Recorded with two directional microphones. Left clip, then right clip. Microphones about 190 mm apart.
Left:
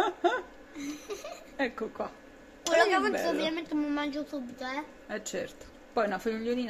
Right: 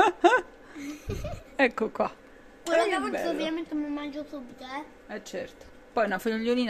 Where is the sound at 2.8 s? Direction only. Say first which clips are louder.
Left 1 dB; 25° left (ahead or behind).